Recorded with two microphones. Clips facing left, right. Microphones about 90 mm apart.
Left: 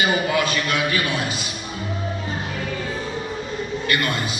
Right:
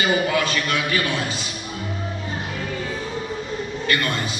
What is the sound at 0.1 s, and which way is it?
A man's voice, 20° left (ahead or behind).